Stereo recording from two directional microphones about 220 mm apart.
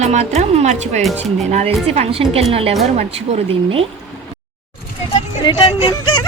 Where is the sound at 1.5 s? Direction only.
30° right (ahead or behind).